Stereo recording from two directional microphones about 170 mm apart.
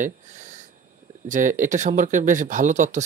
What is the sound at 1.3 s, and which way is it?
Speech, 50° right (ahead or behind).